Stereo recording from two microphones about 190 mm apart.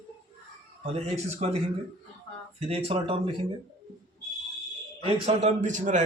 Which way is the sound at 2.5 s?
30° right (ahead or behind).